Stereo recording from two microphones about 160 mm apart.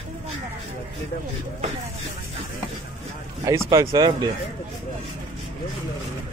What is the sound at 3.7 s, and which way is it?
Speech, 20° right (ahead or behind).